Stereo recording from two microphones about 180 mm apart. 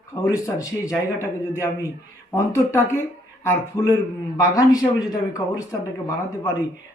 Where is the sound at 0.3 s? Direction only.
15° left (ahead or behind).